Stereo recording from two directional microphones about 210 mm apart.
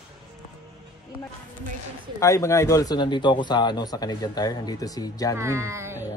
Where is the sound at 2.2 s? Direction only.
15° left (ahead or behind).